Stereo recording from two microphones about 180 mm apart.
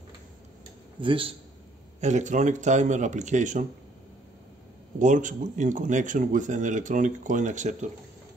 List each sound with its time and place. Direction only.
1.0 s a man's voice: 30° right (ahead or behind)
2.0 s speech: 40° right (ahead or behind)
4.9 s speech: 45° right (ahead or behind)